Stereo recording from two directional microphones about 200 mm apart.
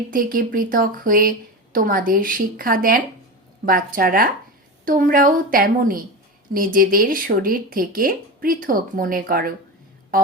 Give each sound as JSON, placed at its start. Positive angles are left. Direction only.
{"t": 0.1, "sound": "speech", "side_deg": -45}